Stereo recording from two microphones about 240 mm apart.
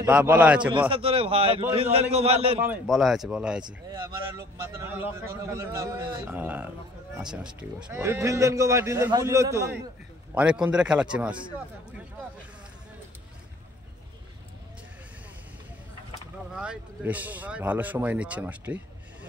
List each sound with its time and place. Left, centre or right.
0.0 s speech: centre
0.8 s a man's voice: right
2.6 s speech: centre
3.6 s a man's voice: centre
16.5 s a man's voice: centre